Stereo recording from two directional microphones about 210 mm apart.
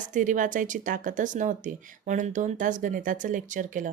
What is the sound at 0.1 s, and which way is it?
Speech, 35° right (ahead or behind).